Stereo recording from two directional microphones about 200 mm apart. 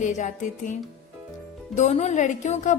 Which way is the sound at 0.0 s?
40° left (ahead or behind).